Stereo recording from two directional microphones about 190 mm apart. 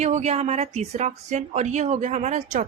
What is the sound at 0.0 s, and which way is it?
A woman's voice, 35° right (ahead or behind).